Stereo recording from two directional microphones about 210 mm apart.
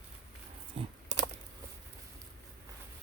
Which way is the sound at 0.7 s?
30° right (ahead or behind).